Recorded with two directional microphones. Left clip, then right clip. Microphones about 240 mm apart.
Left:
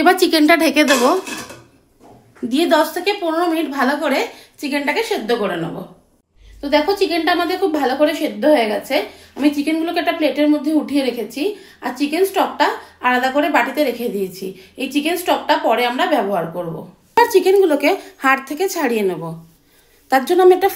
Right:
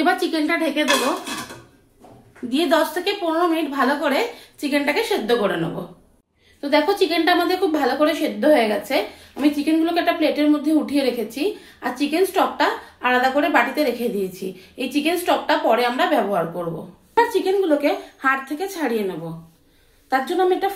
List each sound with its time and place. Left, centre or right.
0.0 s a woman's voice: left
2.5 s a woman's voice: centre
4.6 s a woman's voice: centre
6.6 s a woman's voice: centre
17.3 s a woman's voice: left